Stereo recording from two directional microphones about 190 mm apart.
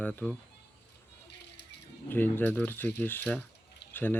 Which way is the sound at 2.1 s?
10° left (ahead or behind).